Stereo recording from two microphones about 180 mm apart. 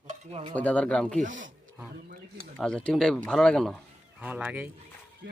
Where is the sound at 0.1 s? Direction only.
35° right (ahead or behind).